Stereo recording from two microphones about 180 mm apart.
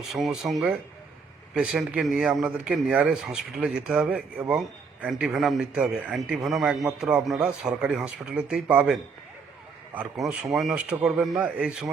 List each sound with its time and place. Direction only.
0.1 s a man's voice: centre (ahead or behind)